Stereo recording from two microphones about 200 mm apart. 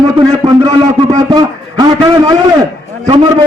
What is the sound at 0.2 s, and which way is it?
A man's voice, 20° right (ahead or behind).